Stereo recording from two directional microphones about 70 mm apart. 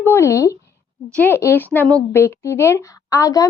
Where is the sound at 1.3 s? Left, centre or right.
Left.